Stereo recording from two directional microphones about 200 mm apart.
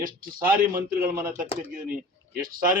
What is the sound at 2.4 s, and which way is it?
Speech, 45° right (ahead or behind).